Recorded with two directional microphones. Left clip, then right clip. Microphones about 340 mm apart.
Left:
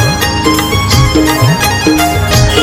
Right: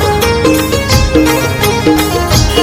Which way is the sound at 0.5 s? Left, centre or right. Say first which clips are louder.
Even; centre.